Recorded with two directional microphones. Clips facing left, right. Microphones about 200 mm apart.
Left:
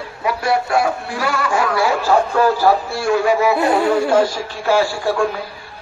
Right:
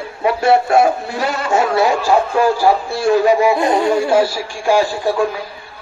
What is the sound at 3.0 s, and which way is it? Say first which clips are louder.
Speech: right 5 dB; 35° right (ahead or behind).